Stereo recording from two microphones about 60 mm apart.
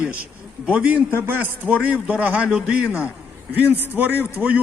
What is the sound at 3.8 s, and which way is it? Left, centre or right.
Speech, right.